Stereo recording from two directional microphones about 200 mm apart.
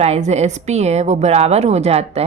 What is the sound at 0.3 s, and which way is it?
A woman's voice, 35° right (ahead or behind).